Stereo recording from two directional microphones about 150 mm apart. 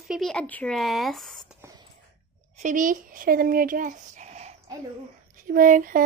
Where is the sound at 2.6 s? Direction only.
60° right (ahead or behind).